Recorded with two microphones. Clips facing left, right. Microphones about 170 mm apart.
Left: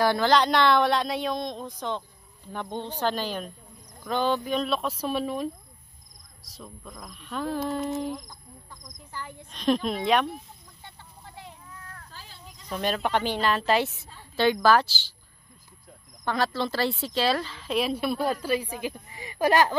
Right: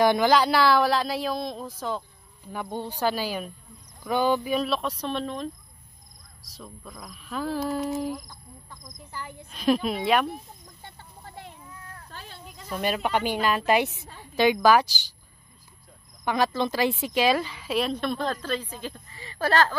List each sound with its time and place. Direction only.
0.0 s a woman's voice: 15° right (ahead or behind)
12.1 s a sound: 60° right (ahead or behind)
12.6 s speech: 5° right (ahead or behind)
16.3 s speech: 15° right (ahead or behind)
17.7 s a woman's voice: 5° left (ahead or behind)